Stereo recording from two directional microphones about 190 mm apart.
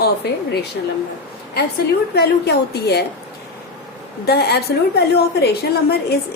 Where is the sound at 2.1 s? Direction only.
60° left (ahead or behind).